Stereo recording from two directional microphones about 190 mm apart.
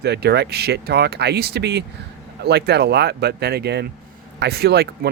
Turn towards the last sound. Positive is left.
turn(degrees=-60)  # may be behind; listen again after turning